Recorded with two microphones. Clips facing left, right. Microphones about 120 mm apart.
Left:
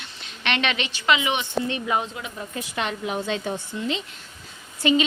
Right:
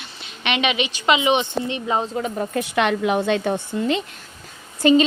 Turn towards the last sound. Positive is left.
turn(degrees=-40)  # may be behind; listen again after turning